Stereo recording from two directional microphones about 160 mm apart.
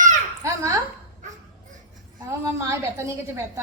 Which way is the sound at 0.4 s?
20° right (ahead or behind).